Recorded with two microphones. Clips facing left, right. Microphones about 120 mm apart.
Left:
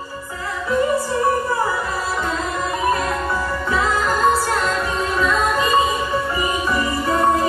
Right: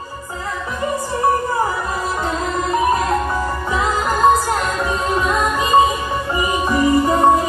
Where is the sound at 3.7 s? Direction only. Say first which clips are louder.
Left 1 dB; 15° right (ahead or behind).